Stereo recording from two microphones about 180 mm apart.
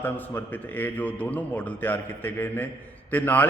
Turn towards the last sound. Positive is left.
turn(degrees=10)  # may be behind; listen again after turning